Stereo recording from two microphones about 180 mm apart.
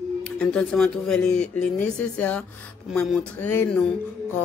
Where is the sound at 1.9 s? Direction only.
5° left (ahead or behind).